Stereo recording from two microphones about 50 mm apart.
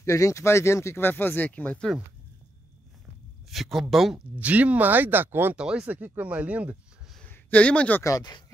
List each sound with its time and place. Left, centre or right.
0.0 s speech: left
3.4 s speech: centre
4.4 s speech: right
5.6 s speech: centre
5.9 s speech: right
7.2 s a sound: left